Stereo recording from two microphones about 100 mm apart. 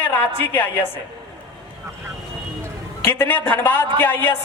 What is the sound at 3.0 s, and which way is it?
A woman's voice, 20° left (ahead or behind).